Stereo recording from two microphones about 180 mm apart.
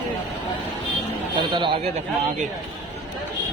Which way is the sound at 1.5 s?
30° right (ahead or behind).